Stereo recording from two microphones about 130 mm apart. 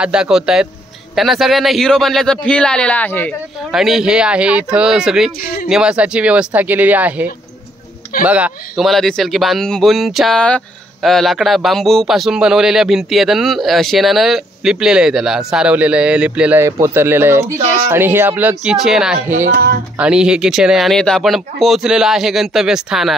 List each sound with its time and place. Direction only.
0.0 s speech: 5° right (ahead or behind); by 3.3 s 15° left (ahead or behind)
3.7 s speech: 5° right (ahead or behind)
8.8 s speech: centre (ahead or behind)